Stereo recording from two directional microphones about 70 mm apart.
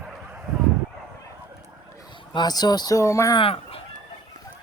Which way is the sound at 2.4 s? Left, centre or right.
Left.